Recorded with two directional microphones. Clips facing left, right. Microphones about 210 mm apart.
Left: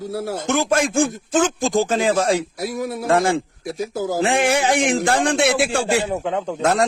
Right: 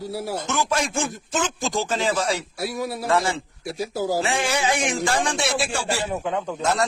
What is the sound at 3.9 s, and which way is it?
Speech, 20° left (ahead or behind).